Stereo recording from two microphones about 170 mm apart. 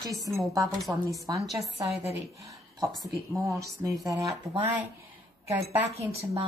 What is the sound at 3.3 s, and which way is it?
Speech, 20° right (ahead or behind).